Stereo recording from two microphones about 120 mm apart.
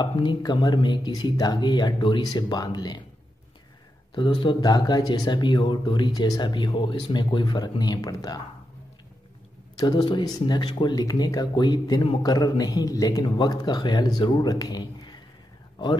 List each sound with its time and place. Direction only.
0.0 s speech: 40° left (ahead or behind)
4.1 s speech: 45° left (ahead or behind)
9.8 s a man's voice: 35° left (ahead or behind)